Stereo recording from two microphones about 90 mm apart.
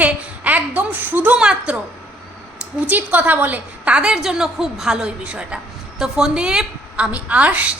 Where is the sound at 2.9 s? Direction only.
20° right (ahead or behind).